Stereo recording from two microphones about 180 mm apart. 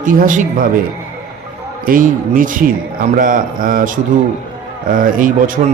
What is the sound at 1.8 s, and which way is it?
A man's voice, 50° right (ahead or behind).